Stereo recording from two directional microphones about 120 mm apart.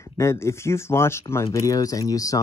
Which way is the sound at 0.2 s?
25° left (ahead or behind).